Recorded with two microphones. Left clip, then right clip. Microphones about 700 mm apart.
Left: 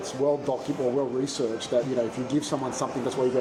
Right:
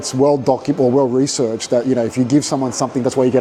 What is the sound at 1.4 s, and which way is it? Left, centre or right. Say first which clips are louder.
Speech: right 9 dB; right.